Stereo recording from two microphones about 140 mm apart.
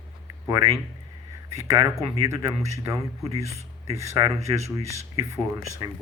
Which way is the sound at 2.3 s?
25° right (ahead or behind).